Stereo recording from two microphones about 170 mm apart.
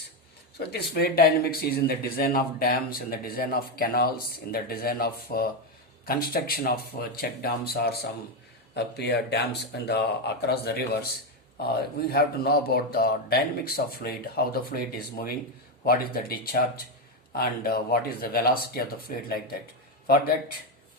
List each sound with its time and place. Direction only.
0.7 s speech: 70° left (ahead or behind)
8.7 s a man's voice: 80° left; by 20.3 s 65° left (ahead or behind)